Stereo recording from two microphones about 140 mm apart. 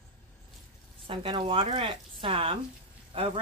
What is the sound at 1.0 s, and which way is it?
A woman's voice, 40° right (ahead or behind).